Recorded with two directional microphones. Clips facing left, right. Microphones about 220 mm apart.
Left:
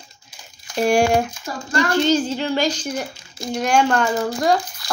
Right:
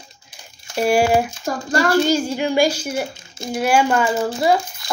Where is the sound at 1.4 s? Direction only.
45° right (ahead or behind).